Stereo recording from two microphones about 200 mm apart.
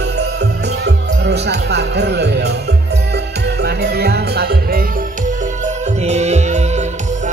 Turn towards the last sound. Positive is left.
turn(degrees=-35)  # may be behind; listen again after turning